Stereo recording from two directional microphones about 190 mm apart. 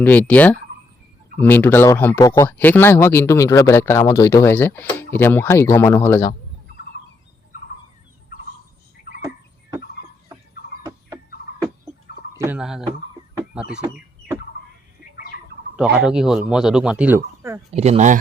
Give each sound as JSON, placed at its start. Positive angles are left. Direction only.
{"t": 0.0, "sound": "speech", "side_deg": 10}
{"t": 12.4, "sound": "speech", "side_deg": -5}
{"t": 13.5, "sound": "chicken", "side_deg": -5}
{"t": 16.0, "sound": "speech", "side_deg": -5}
{"t": 17.7, "sound": "speech", "side_deg": -35}